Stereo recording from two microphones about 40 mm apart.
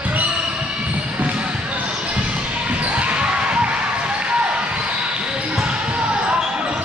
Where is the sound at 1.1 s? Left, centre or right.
Right.